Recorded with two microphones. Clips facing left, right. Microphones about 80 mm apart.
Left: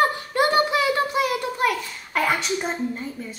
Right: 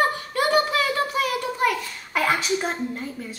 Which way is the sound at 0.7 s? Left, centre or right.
Centre.